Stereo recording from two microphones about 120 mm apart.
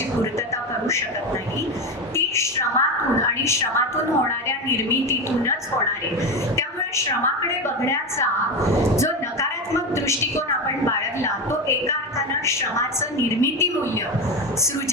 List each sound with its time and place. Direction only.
2.1 s a sound: 20° left (ahead or behind)
3.4 s a woman's voice: 25° left (ahead or behind)
6.6 s a woman's voice: 25° left (ahead or behind)
12.5 s a woman's voice: 25° left (ahead or behind)